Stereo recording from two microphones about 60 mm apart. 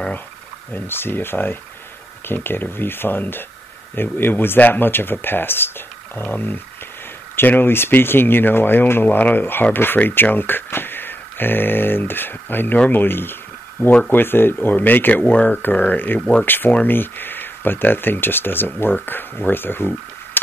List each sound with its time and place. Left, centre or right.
0.7 s speech: left